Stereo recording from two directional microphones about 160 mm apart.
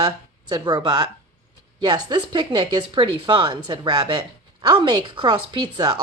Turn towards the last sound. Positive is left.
turn(degrees=-25)  # may be behind; listen again after turning